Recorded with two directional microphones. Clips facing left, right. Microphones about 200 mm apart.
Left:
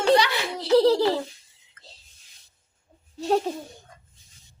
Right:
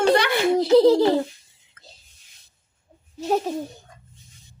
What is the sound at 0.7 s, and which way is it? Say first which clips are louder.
Speech: right 2 dB; 20° right (ahead or behind).